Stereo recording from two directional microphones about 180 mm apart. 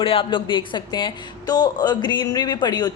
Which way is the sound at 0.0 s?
30° left (ahead or behind).